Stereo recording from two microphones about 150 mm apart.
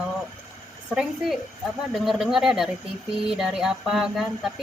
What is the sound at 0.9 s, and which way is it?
Speech, 5° right (ahead or behind).